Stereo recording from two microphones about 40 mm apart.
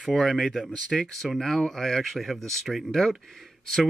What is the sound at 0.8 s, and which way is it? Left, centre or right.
Speech, centre.